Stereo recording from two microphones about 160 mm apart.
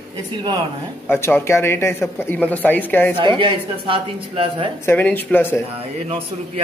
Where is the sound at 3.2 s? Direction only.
30° right (ahead or behind).